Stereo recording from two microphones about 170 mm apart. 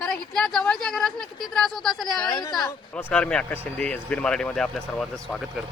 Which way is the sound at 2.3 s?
25° left (ahead or behind).